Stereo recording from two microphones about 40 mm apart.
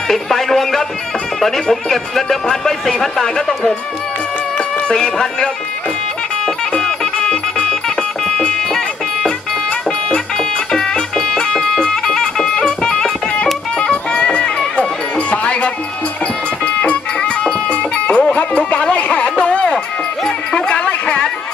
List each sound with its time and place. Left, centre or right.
0.1 s music: centre
1.4 s speech: centre
4.9 s speech: centre
6.4 s music: centre
10.1 s music: centre
17.9 s a sound: left
20.2 s music: left